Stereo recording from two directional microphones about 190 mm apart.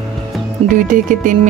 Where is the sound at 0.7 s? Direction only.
45° right (ahead or behind).